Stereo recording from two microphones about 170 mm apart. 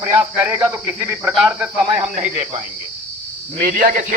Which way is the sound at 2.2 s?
45° right (ahead or behind).